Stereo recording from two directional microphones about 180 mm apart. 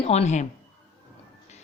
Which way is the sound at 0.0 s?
35° left (ahead or behind).